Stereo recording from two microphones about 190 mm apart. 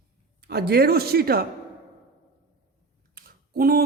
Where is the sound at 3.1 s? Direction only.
50° right (ahead or behind).